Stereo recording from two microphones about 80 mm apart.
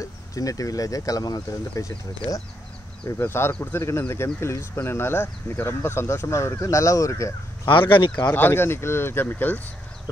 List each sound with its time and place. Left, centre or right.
0.0 s speech: left
3.1 s speech: left
7.6 s speech: left
8.3 s speech: left